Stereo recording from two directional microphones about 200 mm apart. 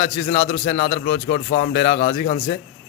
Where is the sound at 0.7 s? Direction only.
35° left (ahead or behind).